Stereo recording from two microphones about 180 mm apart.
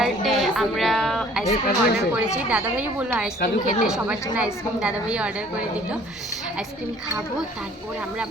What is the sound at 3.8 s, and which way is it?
Speech, 5° right (ahead or behind).